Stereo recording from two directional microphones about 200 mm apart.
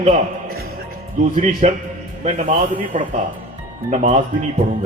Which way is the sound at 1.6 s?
35° right (ahead or behind).